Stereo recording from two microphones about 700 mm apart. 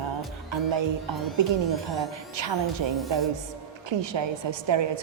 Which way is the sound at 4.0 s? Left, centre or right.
Right.